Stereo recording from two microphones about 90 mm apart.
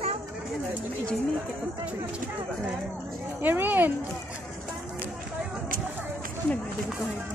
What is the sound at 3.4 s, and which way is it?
Speech, 20° right (ahead or behind).